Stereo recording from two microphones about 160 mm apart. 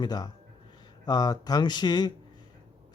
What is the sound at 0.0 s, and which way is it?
Speech, 25° left (ahead or behind).